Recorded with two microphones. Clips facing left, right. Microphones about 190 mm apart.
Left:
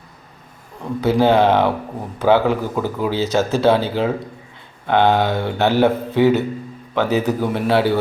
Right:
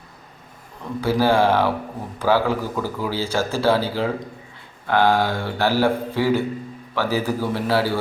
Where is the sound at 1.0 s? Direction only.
20° left (ahead or behind).